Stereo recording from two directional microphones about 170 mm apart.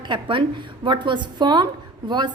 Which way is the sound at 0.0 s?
30° right (ahead or behind).